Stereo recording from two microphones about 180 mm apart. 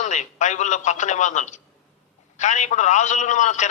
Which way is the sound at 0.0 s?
40° left (ahead or behind).